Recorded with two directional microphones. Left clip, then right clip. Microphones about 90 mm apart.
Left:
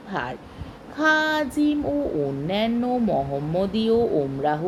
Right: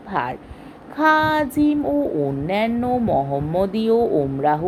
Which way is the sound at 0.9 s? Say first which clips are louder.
Right 4 dB; 45° right (ahead or behind).